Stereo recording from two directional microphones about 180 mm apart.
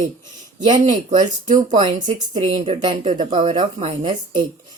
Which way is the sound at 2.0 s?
25° right (ahead or behind).